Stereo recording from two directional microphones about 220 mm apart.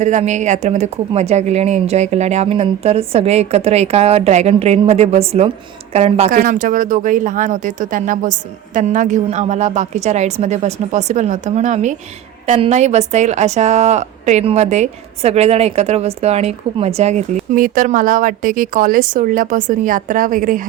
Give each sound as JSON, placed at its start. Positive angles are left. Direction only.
{"t": 0.0, "sound": "a woman's voice", "side_deg": -30}